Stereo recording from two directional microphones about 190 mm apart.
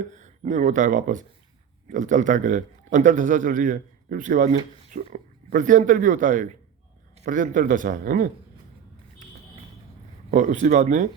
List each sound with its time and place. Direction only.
0.1 s a man's voice: 40° right (ahead or behind)
10.3 s speech: 40° right (ahead or behind)